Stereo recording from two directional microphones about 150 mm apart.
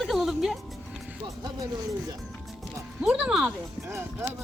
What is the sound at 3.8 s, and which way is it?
Speech, 15° right (ahead or behind).